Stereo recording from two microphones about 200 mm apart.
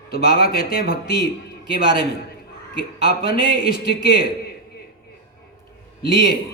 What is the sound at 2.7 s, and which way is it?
Speech, 50° left (ahead or behind).